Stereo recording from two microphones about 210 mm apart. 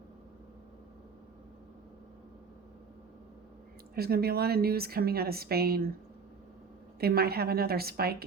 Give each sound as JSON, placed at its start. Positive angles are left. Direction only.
{"t": 3.9, "sound": "a woman's voice", "side_deg": -45}
{"t": 7.0, "sound": "a woman's voice", "side_deg": -45}